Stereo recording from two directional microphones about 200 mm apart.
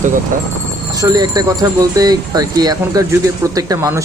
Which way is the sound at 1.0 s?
20° right (ahead or behind).